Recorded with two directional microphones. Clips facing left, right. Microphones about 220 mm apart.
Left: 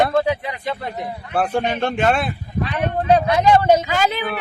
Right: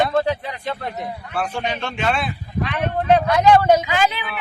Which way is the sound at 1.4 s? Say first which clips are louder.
Left 6 dB; 50° left (ahead or behind).